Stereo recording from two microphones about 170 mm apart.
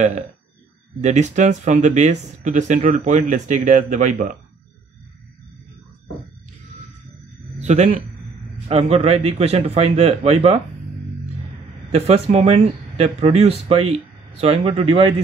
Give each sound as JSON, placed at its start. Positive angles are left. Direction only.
{"t": 1.0, "sound": "speech", "side_deg": -45}
{"t": 7.5, "sound": "speech", "side_deg": -40}
{"t": 11.9, "sound": "speech", "side_deg": -40}